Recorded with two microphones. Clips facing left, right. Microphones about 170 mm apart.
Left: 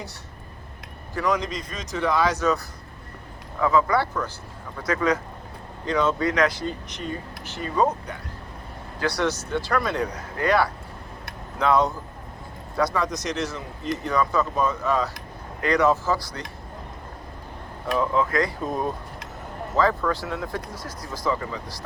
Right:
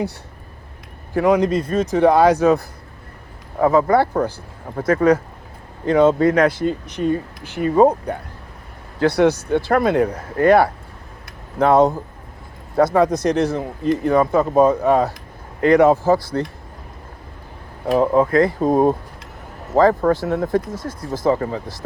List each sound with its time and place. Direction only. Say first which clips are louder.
1.1 s speech: right 10 dB; 55° right (ahead or behind)
17.9 s speech: right 8 dB; 50° right (ahead or behind)